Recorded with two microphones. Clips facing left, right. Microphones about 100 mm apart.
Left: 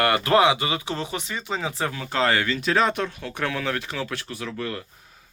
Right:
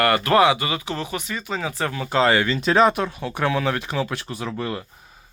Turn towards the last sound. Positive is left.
turn(degrees=-25)  # may be behind; listen again after turning